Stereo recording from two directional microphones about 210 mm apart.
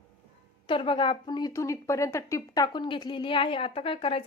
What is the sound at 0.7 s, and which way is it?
A woman's voice, 25° left (ahead or behind).